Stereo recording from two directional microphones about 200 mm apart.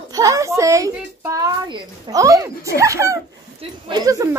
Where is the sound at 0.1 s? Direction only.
20° right (ahead or behind).